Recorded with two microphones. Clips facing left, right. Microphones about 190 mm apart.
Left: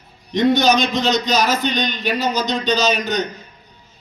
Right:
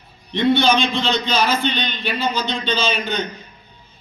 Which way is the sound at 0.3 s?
40° left (ahead or behind).